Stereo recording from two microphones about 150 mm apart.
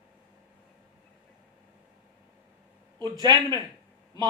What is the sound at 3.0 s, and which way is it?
Speech, 25° right (ahead or behind).